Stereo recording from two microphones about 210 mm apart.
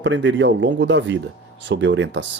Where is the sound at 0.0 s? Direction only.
60° right (ahead or behind).